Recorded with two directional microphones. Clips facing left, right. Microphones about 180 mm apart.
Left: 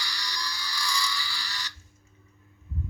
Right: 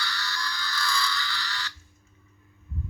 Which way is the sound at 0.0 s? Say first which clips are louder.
Right 3 dB; 15° left (ahead or behind).